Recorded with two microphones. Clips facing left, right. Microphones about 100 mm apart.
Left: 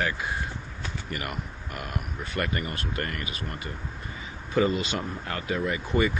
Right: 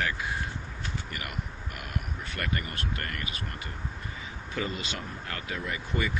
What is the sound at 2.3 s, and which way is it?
Speech, 25° left (ahead or behind).